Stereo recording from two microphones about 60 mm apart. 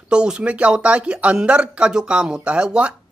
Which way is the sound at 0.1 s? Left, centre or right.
Centre.